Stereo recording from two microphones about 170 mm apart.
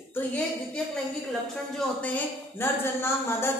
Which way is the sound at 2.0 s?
10° left (ahead or behind).